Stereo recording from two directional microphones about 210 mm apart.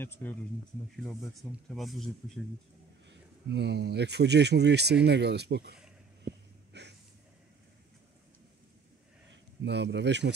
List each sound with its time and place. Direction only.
0.0 s speech: 10° left (ahead or behind)
1.4 s speech: centre (ahead or behind)
3.4 s speech: 55° right (ahead or behind)
6.7 s a sound: 55° right (ahead or behind)
9.3 s speech: 55° right (ahead or behind)